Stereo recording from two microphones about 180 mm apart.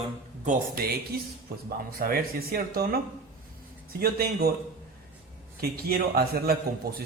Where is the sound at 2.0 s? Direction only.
55° right (ahead or behind).